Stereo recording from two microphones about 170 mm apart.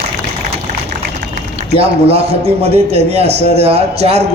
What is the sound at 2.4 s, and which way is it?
A man's voice, 35° right (ahead or behind).